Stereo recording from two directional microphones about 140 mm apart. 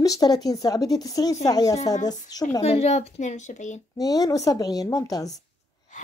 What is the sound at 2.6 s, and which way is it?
A woman's voice, 45° left (ahead or behind).